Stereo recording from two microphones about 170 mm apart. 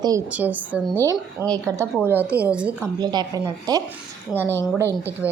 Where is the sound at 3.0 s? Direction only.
25° right (ahead or behind).